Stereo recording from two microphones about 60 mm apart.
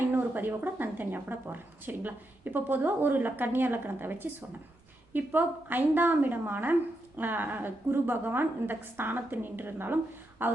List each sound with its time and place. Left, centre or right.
0.1 s a woman's voice: right